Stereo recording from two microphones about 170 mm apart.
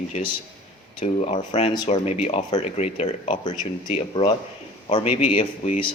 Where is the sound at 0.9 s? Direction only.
35° left (ahead or behind).